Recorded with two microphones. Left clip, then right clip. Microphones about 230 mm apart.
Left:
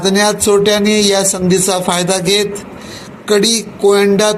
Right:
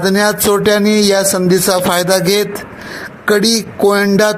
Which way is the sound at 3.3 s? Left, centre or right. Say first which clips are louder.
Even; right.